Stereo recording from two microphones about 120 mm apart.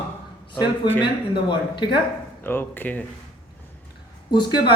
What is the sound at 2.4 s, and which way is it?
Speech, 15° left (ahead or behind).